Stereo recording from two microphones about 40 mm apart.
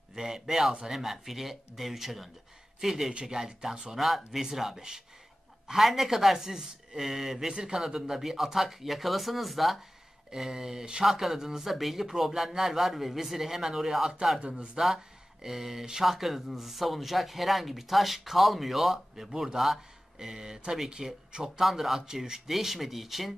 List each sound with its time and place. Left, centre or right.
0.1 s speech: centre
3.1 s speech: right
3.3 s speech: centre
15.4 s speech: centre
21.5 s speech: centre